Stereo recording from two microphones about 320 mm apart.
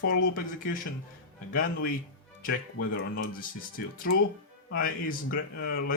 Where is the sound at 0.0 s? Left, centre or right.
Left.